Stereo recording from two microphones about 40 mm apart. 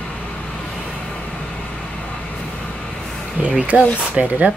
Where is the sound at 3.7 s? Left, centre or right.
Right.